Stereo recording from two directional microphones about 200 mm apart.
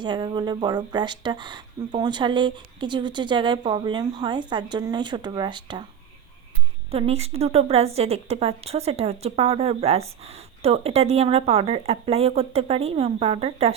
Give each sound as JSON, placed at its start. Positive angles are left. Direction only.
{"t": 0.0, "sound": "speech", "side_deg": -25}
{"t": 6.9, "sound": "a woman's voice", "side_deg": -30}